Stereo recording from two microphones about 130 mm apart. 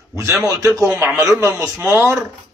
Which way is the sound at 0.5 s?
25° right (ahead or behind).